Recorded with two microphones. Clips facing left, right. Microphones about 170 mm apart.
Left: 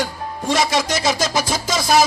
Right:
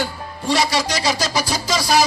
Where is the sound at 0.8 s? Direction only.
50° left (ahead or behind).